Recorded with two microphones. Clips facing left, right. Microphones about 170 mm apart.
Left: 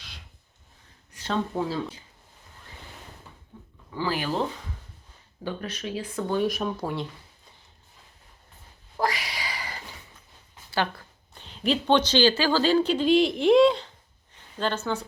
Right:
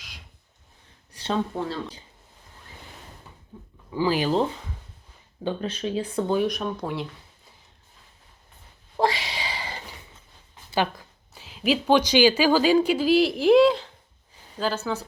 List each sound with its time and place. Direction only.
1.2 s a sound: 30° right (ahead or behind)
1.5 s speech: 5° left (ahead or behind)
3.5 s a sound: 10° right (ahead or behind)
3.9 s speech: 15° right (ahead or behind)
5.4 s speech: 25° right (ahead or behind)
6.3 s speech: centre (ahead or behind)
9.0 s a sound: 25° right (ahead or behind)
10.7 s speech: 15° right (ahead or behind)
11.3 s speech: 5° right (ahead or behind)